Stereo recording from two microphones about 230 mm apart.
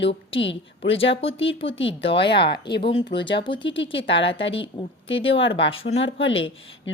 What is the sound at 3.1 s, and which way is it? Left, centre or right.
Speech, left.